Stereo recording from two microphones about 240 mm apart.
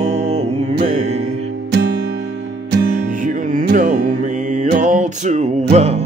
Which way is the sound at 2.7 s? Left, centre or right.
Right.